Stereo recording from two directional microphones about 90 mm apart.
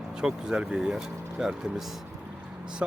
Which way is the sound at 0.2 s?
10° right (ahead or behind).